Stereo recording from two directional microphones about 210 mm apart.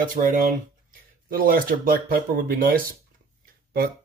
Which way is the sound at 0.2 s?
40° right (ahead or behind).